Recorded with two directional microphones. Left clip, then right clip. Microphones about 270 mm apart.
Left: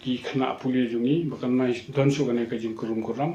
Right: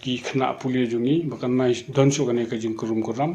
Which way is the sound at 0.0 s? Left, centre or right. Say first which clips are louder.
Right 3 dB; right.